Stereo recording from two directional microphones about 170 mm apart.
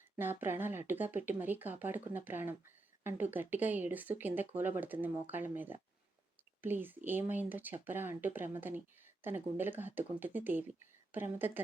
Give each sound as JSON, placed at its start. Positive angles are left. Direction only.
{"t": 0.2, "sound": "speech", "side_deg": -10}